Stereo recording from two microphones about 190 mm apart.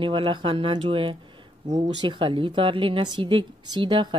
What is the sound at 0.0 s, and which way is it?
A woman's voice, 25° right (ahead or behind).